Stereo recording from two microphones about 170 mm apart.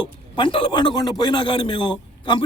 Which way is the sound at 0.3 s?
30° left (ahead or behind).